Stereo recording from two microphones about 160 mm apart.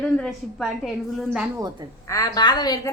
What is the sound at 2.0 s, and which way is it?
Speech, 20° left (ahead or behind).